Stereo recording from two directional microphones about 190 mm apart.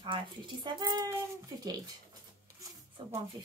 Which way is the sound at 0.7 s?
20° right (ahead or behind).